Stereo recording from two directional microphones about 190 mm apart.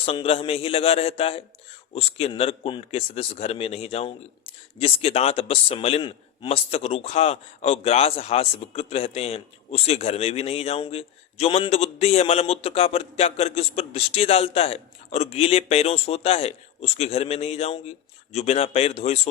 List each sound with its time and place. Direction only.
0.0 s a man's voice: 30° left (ahead or behind)